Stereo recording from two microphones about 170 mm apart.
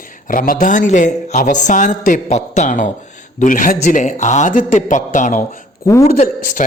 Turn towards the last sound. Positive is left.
turn(degrees=50)  # may be behind; listen again after turning